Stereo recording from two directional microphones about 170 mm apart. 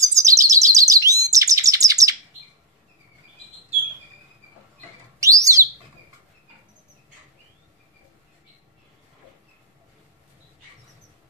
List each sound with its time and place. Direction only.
0.0 s bird: 20° right (ahead or behind)
5.2 s bird: 20° right (ahead or behind)